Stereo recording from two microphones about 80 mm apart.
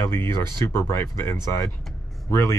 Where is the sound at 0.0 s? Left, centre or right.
Left.